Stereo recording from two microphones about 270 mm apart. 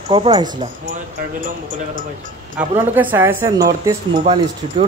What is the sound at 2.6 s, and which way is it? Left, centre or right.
Speech, centre.